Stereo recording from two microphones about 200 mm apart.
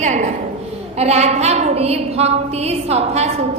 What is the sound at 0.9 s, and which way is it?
A woman's voice, 30° right (ahead or behind).